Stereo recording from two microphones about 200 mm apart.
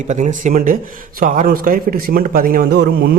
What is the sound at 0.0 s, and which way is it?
Speech, 40° right (ahead or behind).